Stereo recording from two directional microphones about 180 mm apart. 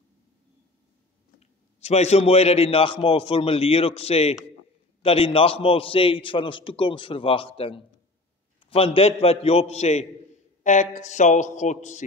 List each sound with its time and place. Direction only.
1.4 s a man's voice: 35° left (ahead or behind)